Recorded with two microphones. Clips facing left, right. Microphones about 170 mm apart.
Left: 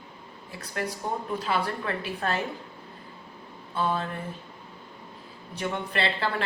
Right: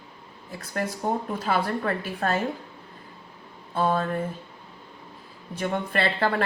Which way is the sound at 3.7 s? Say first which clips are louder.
Right 4 dB; 45° right (ahead or behind).